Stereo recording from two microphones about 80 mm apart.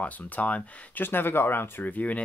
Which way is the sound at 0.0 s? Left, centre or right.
Centre.